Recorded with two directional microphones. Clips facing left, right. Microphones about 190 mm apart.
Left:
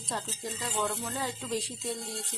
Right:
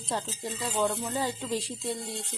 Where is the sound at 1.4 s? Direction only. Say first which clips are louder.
Right 2 dB; 30° right (ahead or behind).